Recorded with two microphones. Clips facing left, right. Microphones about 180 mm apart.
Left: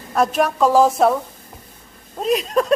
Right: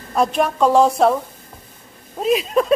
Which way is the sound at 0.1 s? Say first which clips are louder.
Even; centre (ahead or behind).